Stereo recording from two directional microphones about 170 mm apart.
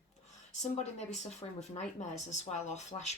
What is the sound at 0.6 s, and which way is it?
Speech, 40° left (ahead or behind).